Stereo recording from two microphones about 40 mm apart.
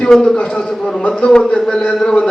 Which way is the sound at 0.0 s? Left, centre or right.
Centre.